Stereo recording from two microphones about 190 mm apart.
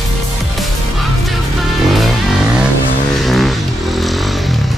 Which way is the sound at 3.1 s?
Centre (ahead or behind).